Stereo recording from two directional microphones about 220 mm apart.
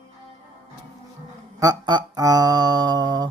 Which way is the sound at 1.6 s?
20° right (ahead or behind).